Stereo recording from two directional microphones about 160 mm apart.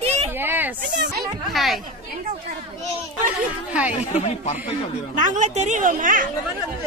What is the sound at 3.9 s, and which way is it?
Speech, 45° left (ahead or behind).